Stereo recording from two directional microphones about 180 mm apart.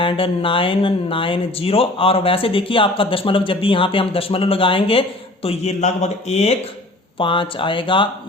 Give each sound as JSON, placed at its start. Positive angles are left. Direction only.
{"t": 0.0, "sound": "speech", "side_deg": 30}